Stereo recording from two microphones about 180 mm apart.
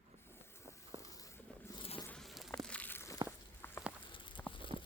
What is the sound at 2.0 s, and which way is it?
Insect, centre (ahead or behind).